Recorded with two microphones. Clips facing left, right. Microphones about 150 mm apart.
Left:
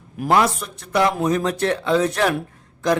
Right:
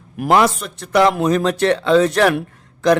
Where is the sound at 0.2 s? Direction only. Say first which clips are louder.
Right 3 dB; 85° right.